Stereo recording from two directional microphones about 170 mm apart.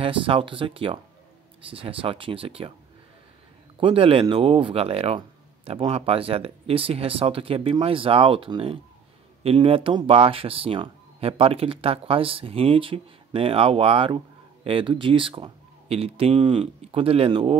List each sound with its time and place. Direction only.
0.0 s speech: 30° right (ahead or behind)
3.8 s speech: 30° right (ahead or behind)